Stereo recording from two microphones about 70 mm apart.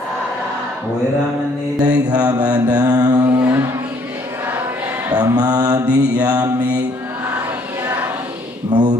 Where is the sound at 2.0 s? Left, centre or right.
Right.